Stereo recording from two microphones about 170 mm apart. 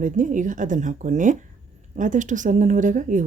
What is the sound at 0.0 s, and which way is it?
A woman's voice, 50° right (ahead or behind).